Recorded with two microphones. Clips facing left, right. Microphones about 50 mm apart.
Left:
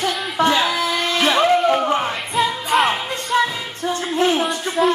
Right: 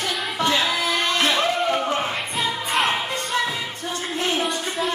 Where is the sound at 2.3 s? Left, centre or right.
Centre.